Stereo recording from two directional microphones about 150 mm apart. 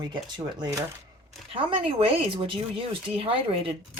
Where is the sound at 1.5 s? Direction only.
40° right (ahead or behind).